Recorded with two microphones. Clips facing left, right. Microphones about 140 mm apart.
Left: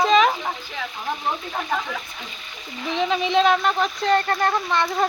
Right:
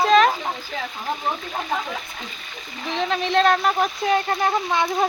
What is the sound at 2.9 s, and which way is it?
Speech, 5° left (ahead or behind).